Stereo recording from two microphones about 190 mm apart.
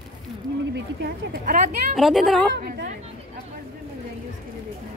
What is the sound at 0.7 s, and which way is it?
Speech, 55° right (ahead or behind).